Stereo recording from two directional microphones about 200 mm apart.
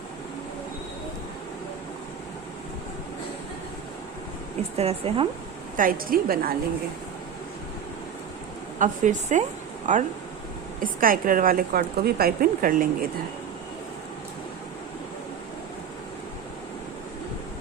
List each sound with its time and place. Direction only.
4.8 s a woman's voice: 30° right (ahead or behind)
5.7 s a woman's voice: 45° right (ahead or behind)
8.8 s a woman's voice: 40° right (ahead or behind)